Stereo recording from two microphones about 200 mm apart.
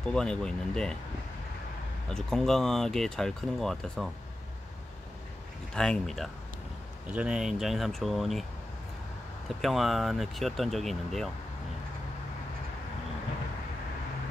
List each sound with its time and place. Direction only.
0.0 s speech: 5° left (ahead or behind)
2.0 s speech: centre (ahead or behind)
5.8 s speech: centre (ahead or behind)
9.5 s speech: centre (ahead or behind)